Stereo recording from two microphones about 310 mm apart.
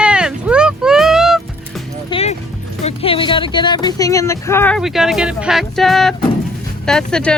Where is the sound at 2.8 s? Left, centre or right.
Centre.